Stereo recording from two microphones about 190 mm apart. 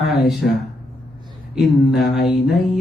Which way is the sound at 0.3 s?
Centre (ahead or behind).